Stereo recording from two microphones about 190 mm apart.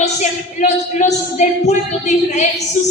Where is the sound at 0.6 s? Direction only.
40° left (ahead or behind).